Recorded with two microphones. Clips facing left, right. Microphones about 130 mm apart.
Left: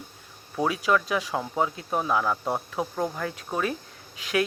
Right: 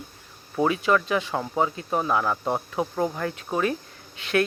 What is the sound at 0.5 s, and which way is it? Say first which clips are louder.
Speech: right 2 dB; centre (ahead or behind).